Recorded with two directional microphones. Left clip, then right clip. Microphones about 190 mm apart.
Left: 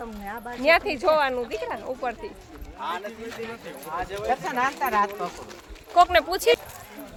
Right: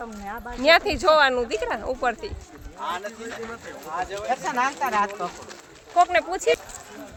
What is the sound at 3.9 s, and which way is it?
Speech, 50° right (ahead or behind).